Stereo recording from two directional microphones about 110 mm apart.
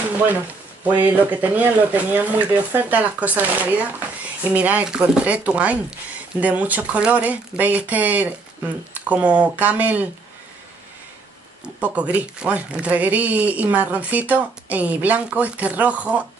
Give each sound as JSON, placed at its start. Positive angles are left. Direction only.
{"t": 0.8, "sound": "speech", "side_deg": -15}
{"t": 11.6, "sound": "speech", "side_deg": -10}